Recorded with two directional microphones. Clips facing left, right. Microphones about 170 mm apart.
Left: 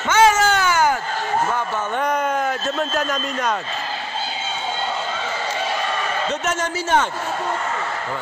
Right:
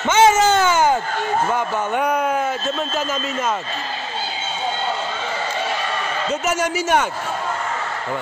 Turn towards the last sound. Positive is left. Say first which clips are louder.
# right 1 dB
turn(degrees=-10)  # may be behind; listen again after turning